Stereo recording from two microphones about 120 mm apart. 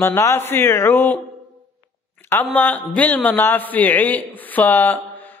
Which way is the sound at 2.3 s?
15° left (ahead or behind).